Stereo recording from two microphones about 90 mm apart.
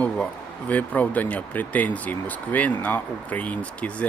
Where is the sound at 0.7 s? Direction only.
15° left (ahead or behind).